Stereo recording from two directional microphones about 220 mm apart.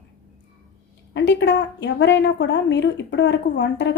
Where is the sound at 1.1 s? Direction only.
55° left (ahead or behind).